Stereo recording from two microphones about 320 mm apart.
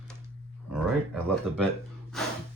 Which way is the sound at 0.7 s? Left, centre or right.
Centre.